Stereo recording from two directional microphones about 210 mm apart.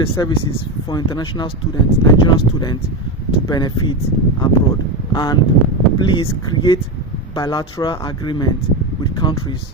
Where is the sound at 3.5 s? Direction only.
20° left (ahead or behind).